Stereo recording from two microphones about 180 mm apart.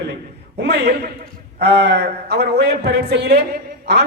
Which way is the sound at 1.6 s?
65° right (ahead or behind).